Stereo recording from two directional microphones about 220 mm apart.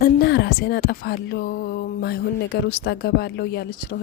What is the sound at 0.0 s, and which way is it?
Speech, 50° left (ahead or behind).